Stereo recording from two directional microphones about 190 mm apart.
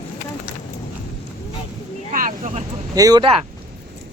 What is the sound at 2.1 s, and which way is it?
Speech, 45° right (ahead or behind).